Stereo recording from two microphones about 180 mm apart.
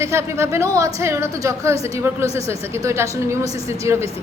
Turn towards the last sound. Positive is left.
turn(degrees=-15)  # may be behind; listen again after turning